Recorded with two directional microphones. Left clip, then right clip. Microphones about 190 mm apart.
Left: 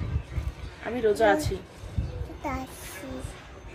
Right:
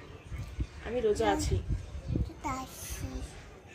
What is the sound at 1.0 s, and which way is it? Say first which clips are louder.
Speech: left 7 dB; 20° left (ahead or behind).